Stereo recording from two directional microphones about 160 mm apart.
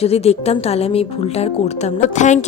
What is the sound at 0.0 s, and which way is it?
Speech, 40° left (ahead or behind).